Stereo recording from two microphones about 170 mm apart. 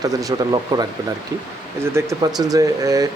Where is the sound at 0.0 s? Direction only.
20° right (ahead or behind).